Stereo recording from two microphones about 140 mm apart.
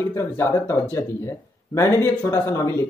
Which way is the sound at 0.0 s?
15° left (ahead or behind).